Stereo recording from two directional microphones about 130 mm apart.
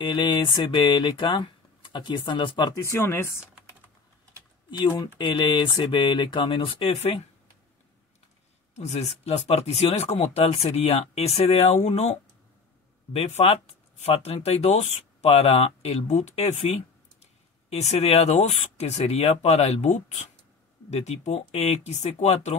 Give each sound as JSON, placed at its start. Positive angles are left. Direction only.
{"t": 0.0, "sound": "speech", "side_deg": 35}
{"t": 2.8, "sound": "speech", "side_deg": 20}
{"t": 4.6, "sound": "speech", "side_deg": 35}
{"t": 8.7, "sound": "speech", "side_deg": 55}